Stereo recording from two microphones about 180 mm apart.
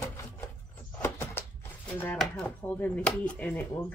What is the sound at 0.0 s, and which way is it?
Door, 15° left (ahead or behind).